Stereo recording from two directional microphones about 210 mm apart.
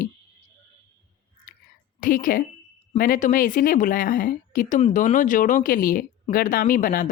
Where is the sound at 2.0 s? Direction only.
40° left (ahead or behind).